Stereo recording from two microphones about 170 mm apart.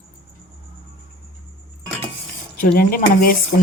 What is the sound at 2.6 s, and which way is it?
Speech, 60° left (ahead or behind).